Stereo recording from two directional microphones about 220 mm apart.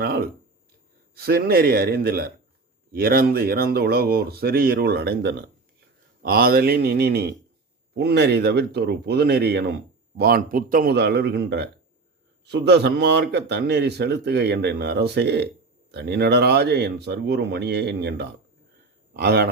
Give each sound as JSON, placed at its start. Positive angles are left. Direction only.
{"t": 0.0, "sound": "a man's voice", "side_deg": -45}